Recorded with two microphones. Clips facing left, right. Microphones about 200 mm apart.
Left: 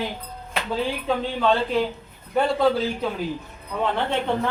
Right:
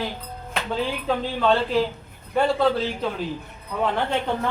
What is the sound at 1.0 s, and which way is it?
Speech, centre (ahead or behind).